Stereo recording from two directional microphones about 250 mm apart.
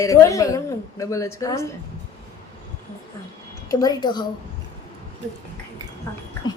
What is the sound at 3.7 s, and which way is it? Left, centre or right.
Speech, centre.